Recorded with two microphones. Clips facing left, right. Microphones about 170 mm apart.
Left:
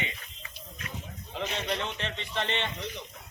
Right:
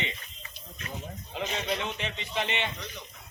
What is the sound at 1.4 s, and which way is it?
A man's voice, 5° right (ahead or behind).